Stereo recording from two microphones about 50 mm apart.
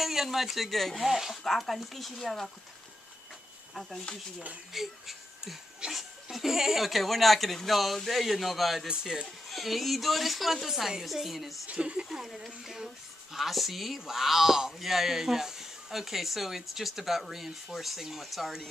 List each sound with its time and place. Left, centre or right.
0.0 s speech: centre
4.7 s speech: centre
5.8 s a sound: centre
6.3 s speech: centre
8.8 s speech: centre
9.2 s speech: centre
11.6 s speech: centre